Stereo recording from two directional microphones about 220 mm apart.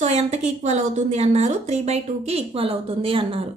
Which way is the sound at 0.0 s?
30° right (ahead or behind).